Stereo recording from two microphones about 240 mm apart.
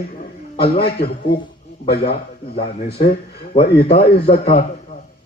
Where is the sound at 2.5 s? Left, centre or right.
Left.